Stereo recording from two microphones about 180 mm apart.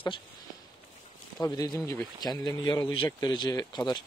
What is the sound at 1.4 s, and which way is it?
A man's voice, 20° left (ahead or behind).